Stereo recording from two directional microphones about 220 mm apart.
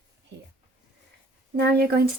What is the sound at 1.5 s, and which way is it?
Speech, 50° right (ahead or behind).